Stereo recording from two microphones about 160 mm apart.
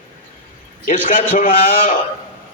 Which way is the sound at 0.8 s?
55° left (ahead or behind).